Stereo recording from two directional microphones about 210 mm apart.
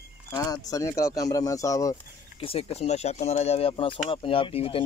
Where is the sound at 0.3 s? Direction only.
15° left (ahead or behind).